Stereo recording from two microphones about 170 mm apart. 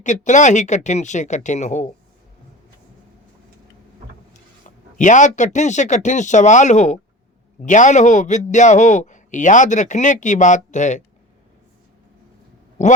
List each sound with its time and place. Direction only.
0.0 s a man's voice: 45° left (ahead or behind)
4.9 s a man's voice: 45° left (ahead or behind)